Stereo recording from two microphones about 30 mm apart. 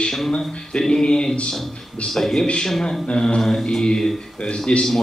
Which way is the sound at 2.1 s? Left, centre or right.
Centre.